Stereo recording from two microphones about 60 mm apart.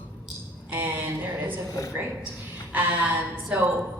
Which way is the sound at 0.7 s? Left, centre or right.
Right.